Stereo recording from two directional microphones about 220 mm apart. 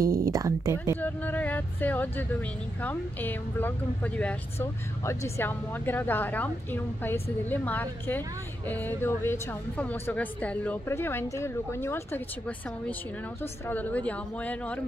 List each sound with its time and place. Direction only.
0.0 s speech: 15° right (ahead or behind)
0.9 s speech: 10° left (ahead or behind)